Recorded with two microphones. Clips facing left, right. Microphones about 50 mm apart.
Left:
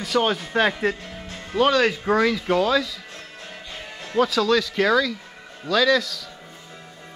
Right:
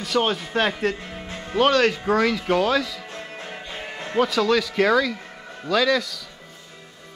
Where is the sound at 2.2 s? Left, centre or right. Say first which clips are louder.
Even; centre.